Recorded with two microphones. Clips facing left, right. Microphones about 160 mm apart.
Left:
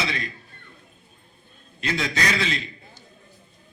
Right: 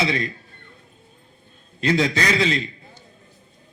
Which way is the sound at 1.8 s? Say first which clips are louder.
Right 6 dB; 30° right (ahead or behind).